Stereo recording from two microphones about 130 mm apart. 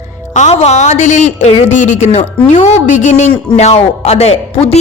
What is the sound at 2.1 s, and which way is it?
A man's voice, 60° left (ahead or behind).